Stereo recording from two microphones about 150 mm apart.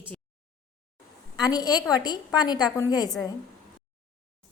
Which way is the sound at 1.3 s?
25° left (ahead or behind).